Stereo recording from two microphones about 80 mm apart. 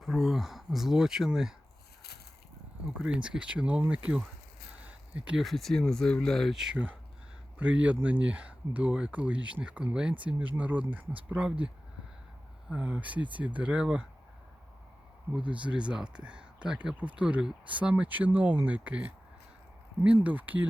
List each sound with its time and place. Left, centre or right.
0.0 s speech: centre
3.0 s speech: centre
4.9 s a sound: centre
5.4 s speech: centre
6.6 s speech: centre
12.7 s speech: centre
15.4 s speech: centre
20.2 s speech: right